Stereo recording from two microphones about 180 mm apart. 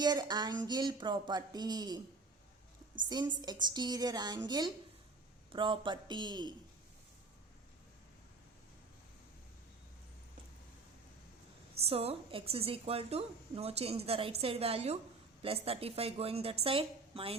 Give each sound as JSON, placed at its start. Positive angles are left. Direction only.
{"t": 0.0, "sound": "speech", "side_deg": -25}
{"t": 3.1, "sound": "speech", "side_deg": -25}
{"t": 11.9, "sound": "a woman's voice", "side_deg": -35}